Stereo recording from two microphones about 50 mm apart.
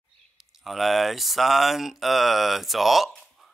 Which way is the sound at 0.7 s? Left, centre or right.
Centre.